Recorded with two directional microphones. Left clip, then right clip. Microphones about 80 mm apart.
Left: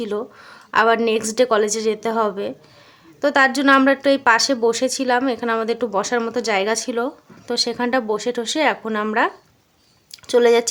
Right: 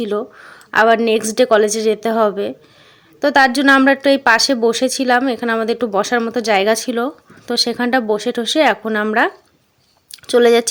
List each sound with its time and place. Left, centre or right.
0.0 s speech: right
10.1 s speech: right